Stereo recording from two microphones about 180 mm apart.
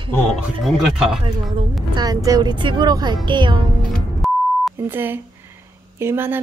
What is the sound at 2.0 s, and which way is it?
Speech, 20° right (ahead or behind).